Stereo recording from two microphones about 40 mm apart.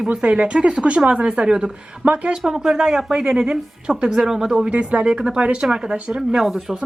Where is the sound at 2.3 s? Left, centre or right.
Centre.